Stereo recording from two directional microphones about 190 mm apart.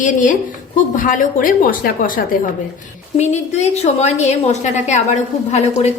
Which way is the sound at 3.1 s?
35° left (ahead or behind).